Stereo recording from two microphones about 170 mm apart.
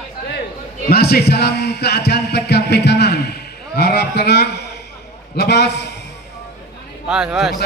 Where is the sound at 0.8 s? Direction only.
65° left (ahead or behind).